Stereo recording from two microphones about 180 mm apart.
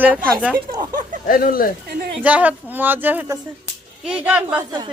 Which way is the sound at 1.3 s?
50° left (ahead or behind).